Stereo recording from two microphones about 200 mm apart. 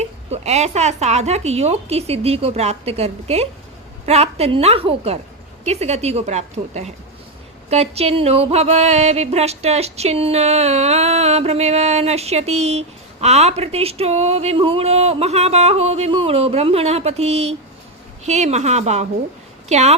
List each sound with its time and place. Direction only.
0.3 s music: 35° right (ahead or behind)
19.6 s speech: 35° right (ahead or behind)